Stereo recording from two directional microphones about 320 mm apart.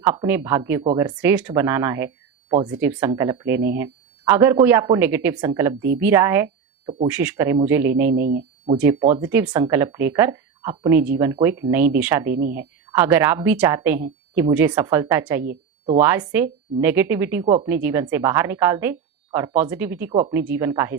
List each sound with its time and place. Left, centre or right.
0.0 s a woman's voice: centre
8.2 s speech: right
8.8 s a woman's voice: centre